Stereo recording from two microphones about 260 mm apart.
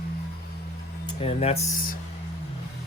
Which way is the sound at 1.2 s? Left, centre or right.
Left.